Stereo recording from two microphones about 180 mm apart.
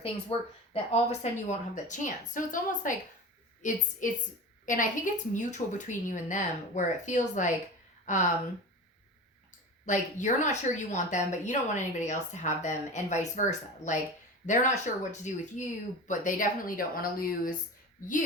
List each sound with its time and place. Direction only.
0.0 s a woman's voice: 30° left (ahead or behind)
4.0 s a woman's voice: 45° left (ahead or behind)
9.8 s a woman's voice: 45° left (ahead or behind)